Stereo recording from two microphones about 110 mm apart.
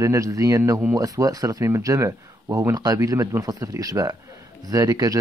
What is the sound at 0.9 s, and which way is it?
Speech, 30° right (ahead or behind).